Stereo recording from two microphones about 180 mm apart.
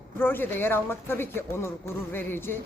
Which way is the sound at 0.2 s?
10° left (ahead or behind).